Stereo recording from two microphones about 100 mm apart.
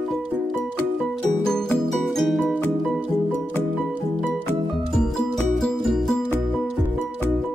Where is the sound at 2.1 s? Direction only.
Centre (ahead or behind).